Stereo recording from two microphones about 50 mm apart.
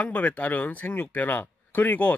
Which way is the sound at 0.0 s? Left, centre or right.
Left.